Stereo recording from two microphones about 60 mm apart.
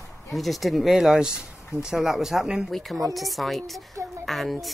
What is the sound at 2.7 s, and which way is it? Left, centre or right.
Speech, centre.